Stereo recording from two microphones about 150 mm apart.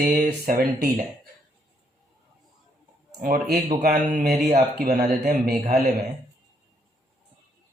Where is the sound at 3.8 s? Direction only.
65° right (ahead or behind).